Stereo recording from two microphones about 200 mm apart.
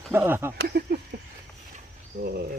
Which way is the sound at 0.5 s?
50° right (ahead or behind).